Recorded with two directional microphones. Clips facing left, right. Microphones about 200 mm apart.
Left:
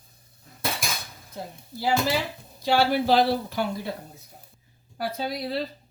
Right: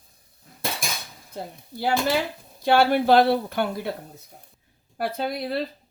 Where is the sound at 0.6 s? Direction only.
Centre (ahead or behind).